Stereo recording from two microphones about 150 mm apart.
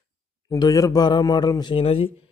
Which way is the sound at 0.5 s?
25° left (ahead or behind).